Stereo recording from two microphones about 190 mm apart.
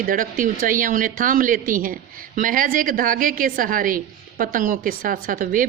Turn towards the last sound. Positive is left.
turn(degrees=-45)  # may be behind; listen again after turning